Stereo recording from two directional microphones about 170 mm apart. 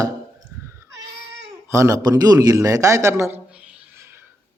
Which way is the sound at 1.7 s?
20° right (ahead or behind).